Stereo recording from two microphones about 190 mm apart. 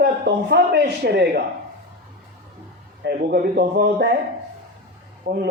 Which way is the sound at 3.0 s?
55° right (ahead or behind).